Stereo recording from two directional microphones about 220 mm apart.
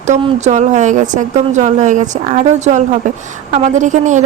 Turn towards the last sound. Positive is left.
turn(degrees=-35)  # may be behind; listen again after turning